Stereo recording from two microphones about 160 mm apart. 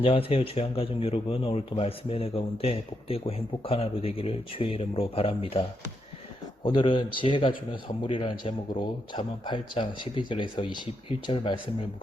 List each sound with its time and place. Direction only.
0.0 s speech: 35° left (ahead or behind)